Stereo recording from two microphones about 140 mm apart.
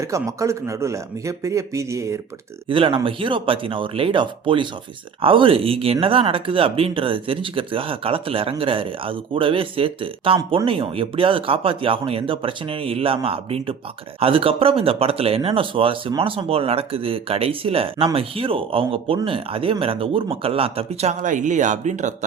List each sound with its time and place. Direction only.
0.0 s speech: 20° right (ahead or behind)
2.6 s speech: 40° right (ahead or behind); by 22.1 s 60° right (ahead or behind)